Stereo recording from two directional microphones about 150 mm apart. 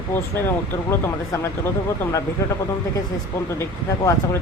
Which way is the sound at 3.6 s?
20° left (ahead or behind).